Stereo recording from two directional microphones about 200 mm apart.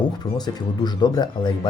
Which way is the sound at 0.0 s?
20° left (ahead or behind).